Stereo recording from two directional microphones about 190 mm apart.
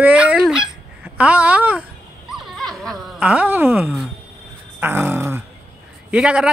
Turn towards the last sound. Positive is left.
turn(degrees=-5)  # may be behind; listen again after turning